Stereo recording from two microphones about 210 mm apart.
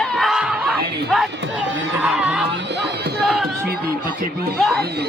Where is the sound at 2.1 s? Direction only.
5° right (ahead or behind).